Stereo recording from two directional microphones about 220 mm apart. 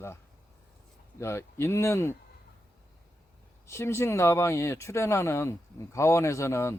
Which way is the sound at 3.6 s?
10° left (ahead or behind).